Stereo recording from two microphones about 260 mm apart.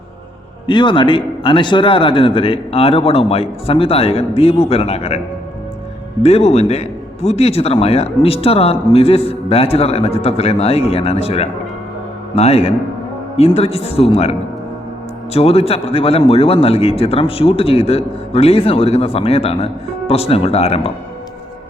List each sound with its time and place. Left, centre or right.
0.7 s a man's voice: centre
6.2 s a man's voice: left